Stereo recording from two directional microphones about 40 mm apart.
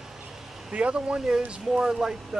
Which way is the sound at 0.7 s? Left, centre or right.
Right.